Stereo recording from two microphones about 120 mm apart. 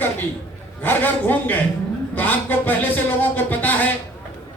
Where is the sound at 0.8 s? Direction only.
15° left (ahead or behind).